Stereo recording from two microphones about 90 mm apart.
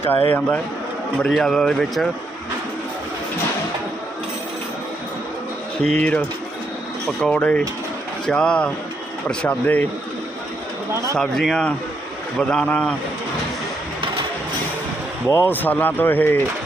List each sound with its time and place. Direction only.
0.0 s speech: 20° left (ahead or behind)
1.3 s speech: 5° left (ahead or behind)
5.8 s speech: 10° left (ahead or behind)
11.2 s speech: 5° left (ahead or behind)
15.3 s speech: 25° left (ahead or behind)